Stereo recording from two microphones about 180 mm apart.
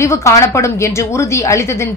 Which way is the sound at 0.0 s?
15° left (ahead or behind).